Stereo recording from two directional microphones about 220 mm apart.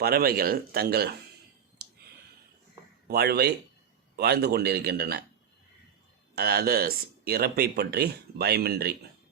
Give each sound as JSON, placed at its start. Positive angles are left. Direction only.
{"t": 0.0, "sound": "speech", "side_deg": -45}
{"t": 3.1, "sound": "speech", "side_deg": -45}
{"t": 6.3, "sound": "speech", "side_deg": -45}